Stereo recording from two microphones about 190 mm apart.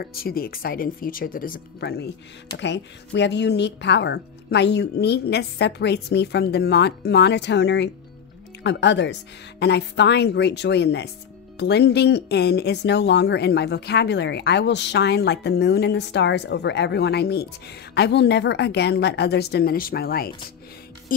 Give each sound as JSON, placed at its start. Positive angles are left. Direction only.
{"t": 0.0, "sound": "speech", "side_deg": 50}